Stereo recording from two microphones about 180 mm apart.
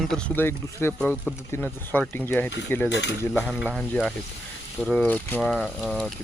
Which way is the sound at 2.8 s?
75° left (ahead or behind).